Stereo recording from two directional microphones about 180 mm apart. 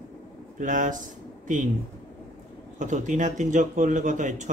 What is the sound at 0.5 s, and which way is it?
Speech, 45° right (ahead or behind).